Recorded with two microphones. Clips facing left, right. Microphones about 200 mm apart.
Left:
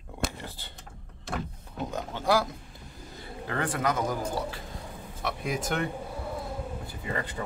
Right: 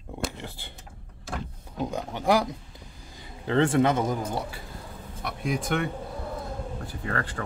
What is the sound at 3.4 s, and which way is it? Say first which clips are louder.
Speech: right 8 dB; 25° right (ahead or behind).